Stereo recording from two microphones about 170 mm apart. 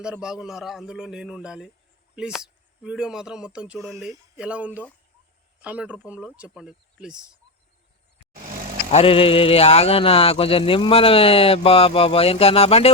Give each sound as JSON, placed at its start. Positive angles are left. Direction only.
{"t": 0.0, "sound": "speech", "side_deg": -5}
{"t": 8.9, "sound": "speech", "side_deg": 35}